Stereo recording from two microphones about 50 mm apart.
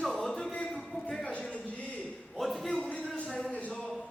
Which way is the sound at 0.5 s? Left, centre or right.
Left.